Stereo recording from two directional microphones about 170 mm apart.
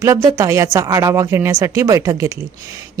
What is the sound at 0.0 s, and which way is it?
A woman's voice, 15° right (ahead or behind).